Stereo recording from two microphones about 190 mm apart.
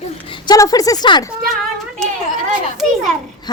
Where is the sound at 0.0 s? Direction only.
25° left (ahead or behind).